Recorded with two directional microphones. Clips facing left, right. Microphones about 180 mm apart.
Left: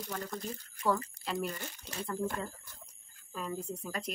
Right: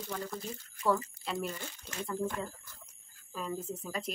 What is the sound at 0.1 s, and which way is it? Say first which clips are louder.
Speech: even; 5° right (ahead or behind).